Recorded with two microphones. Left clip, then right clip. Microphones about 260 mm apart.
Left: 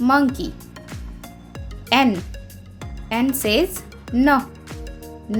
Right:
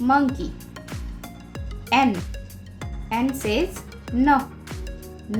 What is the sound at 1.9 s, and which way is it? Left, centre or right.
Speech, left.